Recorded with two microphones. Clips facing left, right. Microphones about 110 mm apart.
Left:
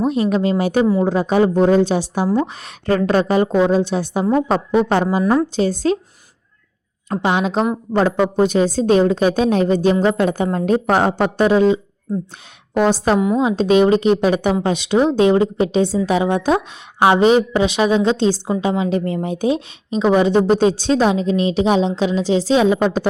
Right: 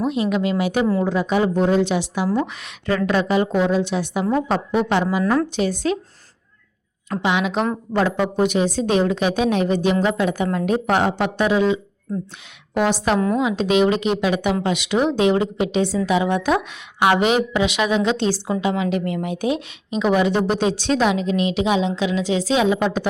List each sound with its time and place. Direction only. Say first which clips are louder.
0.0 s a woman's voice: left 3 dB; 40° left (ahead or behind)
5.2 s a woman's voice: left 3 dB; 15° left (ahead or behind)
5.5 s a woman's voice: left 4 dB; 35° left (ahead or behind)
7.1 s a woman's voice: left 3 dB; 40° left (ahead or behind)